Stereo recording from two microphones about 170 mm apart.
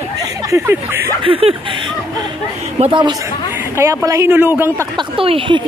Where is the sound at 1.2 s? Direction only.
35° right (ahead or behind).